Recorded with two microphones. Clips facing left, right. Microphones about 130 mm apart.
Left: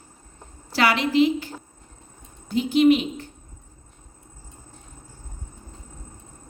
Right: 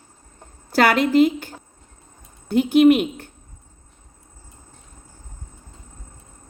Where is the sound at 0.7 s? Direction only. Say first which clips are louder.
Right 4 dB; 50° right (ahead or behind).